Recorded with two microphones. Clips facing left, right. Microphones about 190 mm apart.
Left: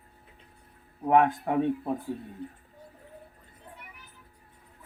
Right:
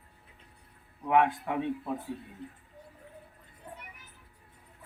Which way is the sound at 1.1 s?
40° left (ahead or behind).